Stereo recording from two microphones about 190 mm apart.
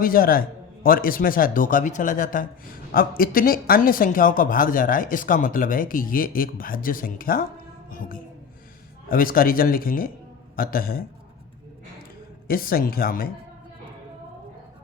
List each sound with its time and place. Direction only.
0.0 s speech: 50° left (ahead or behind)
7.9 s music: 45° left (ahead or behind)
9.0 s speech: 50° left (ahead or behind)
12.5 s speech: 50° left (ahead or behind)